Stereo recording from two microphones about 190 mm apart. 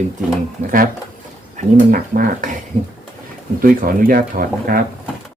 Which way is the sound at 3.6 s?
50° right (ahead or behind).